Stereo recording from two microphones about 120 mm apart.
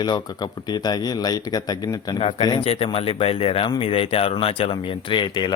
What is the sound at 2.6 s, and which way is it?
Speech, 50° left (ahead or behind).